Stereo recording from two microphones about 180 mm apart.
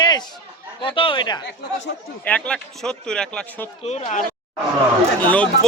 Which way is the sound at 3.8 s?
35° left (ahead or behind).